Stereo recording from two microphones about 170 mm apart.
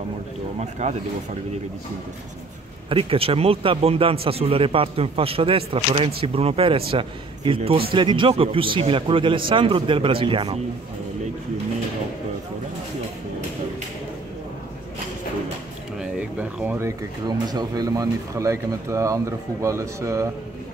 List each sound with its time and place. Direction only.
0.6 s speech: 40° right (ahead or behind)
2.9 s a man's voice: 35° right (ahead or behind)
16.0 s a sound: 5° right (ahead or behind)
17.5 s speech: 20° right (ahead or behind)